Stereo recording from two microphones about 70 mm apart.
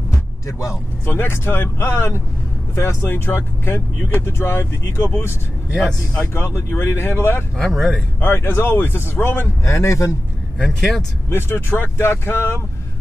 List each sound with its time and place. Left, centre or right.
0.5 s a man's voice: left
1.1 s speech: left
5.8 s speech: centre
6.3 s speech: left
7.5 s speech: centre
8.2 s speech: left
9.7 s a man's voice: left
10.8 s speech: centre
11.2 s speech: left